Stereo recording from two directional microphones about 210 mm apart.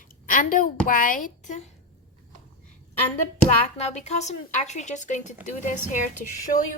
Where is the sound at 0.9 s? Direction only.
40° left (ahead or behind).